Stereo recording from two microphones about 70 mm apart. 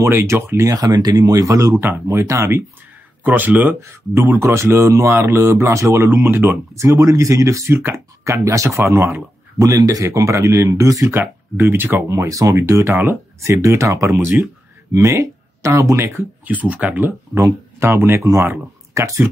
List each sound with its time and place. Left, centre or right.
0.0 s speech: right
0.7 s speech: right
1.8 s speech: right
2.0 s speech: right
3.3 s speech: right
4.1 s speech: right
11.1 s speech: right
12.1 s speech: right
16.4 s speech: right